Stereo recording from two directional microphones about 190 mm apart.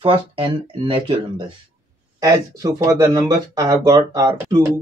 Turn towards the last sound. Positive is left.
turn(degrees=-20)  # may be behind; listen again after turning